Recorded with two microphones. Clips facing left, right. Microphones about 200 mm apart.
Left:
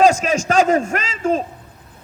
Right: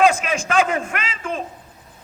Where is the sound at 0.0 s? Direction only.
40° left (ahead or behind).